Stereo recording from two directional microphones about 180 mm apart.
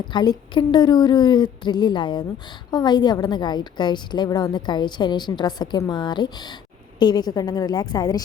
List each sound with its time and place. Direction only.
0.0 s a woman's voice: 25° left (ahead or behind)